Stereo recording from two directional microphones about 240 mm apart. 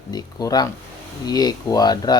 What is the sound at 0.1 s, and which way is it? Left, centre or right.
Speech, centre.